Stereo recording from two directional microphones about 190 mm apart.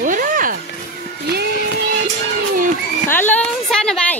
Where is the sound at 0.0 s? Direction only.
45° right (ahead or behind).